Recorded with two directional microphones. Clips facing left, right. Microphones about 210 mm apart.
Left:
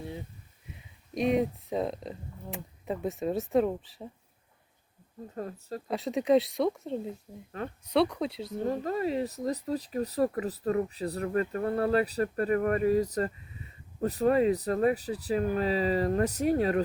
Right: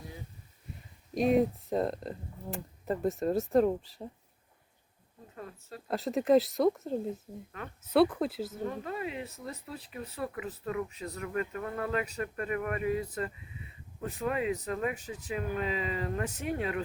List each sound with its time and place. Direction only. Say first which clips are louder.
0.7 s speech: right 1 dB; centre (ahead or behind)
5.3 s speech: left 8 dB; 40° left (ahead or behind)
5.9 s speech: even; centre (ahead or behind)
8.6 s speech: left 8 dB; 35° left (ahead or behind)